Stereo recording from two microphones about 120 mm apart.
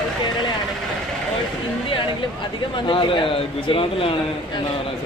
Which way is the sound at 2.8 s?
45° left (ahead or behind).